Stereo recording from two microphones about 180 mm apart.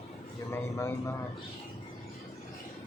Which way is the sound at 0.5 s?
15° left (ahead or behind).